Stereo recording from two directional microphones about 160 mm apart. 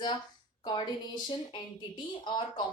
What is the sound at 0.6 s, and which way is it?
Speech, 30° left (ahead or behind).